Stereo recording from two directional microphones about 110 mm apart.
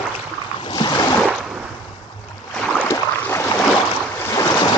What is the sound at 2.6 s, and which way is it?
Boat, 10° left (ahead or behind).